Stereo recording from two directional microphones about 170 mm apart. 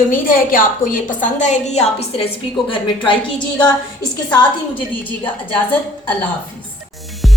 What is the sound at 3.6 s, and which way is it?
Speech, 25° left (ahead or behind).